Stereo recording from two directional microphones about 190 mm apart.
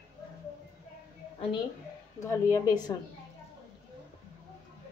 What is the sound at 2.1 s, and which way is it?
Speech, 15° left (ahead or behind).